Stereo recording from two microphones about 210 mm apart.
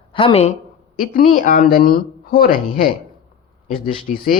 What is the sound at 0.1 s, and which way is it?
Speech, 25° left (ahead or behind).